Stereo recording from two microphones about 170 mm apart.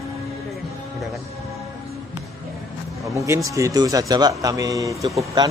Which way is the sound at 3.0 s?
20° right (ahead or behind).